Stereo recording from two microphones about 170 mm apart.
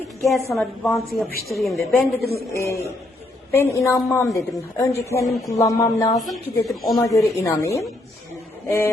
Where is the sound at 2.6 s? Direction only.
20° left (ahead or behind).